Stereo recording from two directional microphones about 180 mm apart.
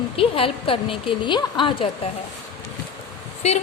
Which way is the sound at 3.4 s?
40° left (ahead or behind).